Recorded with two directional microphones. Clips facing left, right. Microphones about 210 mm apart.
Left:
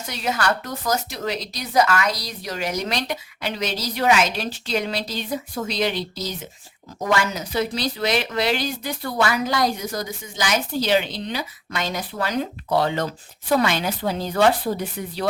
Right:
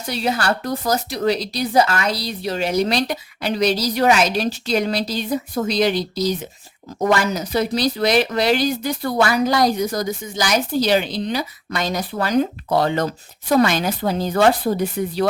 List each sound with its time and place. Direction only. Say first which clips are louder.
0.1 s speech: right 3 dB; 30° right (ahead or behind)